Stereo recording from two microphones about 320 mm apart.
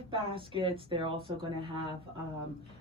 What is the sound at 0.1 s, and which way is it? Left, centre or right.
Speech, centre.